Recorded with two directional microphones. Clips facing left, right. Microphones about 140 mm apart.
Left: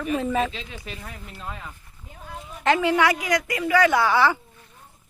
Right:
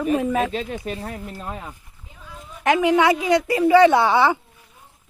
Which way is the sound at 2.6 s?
15° right (ahead or behind).